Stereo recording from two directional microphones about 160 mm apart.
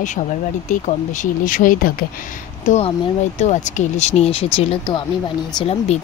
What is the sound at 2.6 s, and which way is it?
Speech, 45° left (ahead or behind).